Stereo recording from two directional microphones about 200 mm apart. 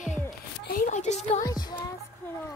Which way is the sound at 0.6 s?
50° left (ahead or behind).